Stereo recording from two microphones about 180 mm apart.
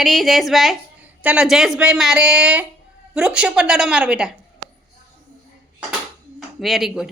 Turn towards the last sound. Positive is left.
turn(degrees=0)  # may be behind; listen again after turning